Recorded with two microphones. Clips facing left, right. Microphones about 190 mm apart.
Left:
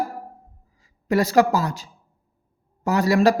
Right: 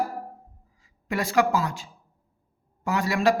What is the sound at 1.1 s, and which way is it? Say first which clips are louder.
Speech: left 5 dB; 40° left (ahead or behind).